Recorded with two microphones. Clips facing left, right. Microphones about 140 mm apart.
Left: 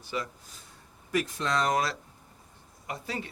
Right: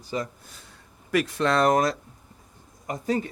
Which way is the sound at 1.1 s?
70° right (ahead or behind).